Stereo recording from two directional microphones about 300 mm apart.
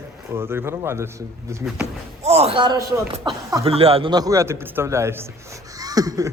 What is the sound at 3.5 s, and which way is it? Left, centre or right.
Speech, centre.